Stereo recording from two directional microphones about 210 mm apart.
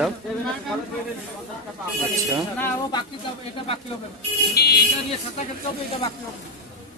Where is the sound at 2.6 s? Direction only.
20° left (ahead or behind).